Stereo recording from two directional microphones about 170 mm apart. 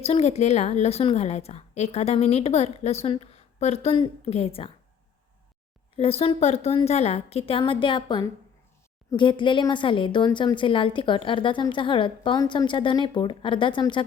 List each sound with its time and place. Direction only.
0.0 s a woman's voice: 40° left (ahead or behind)
6.0 s a woman's voice: 35° left (ahead or behind)